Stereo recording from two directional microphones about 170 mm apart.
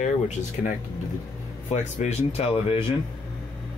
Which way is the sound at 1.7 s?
40° left (ahead or behind).